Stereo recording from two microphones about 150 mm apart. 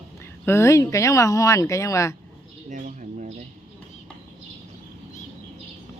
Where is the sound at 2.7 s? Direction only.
60° right (ahead or behind).